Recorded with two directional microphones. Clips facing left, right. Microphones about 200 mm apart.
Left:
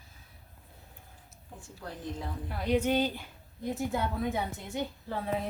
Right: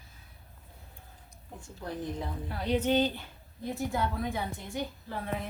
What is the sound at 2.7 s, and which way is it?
Speech, 10° left (ahead or behind).